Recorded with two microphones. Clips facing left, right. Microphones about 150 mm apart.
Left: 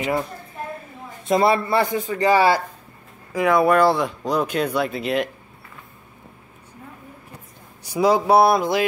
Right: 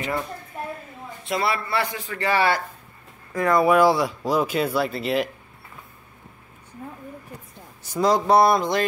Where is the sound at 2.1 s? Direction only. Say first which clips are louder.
Left 5 dB; 15° left (ahead or behind).